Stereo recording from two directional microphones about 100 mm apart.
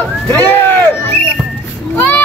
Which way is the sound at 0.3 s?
15° left (ahead or behind).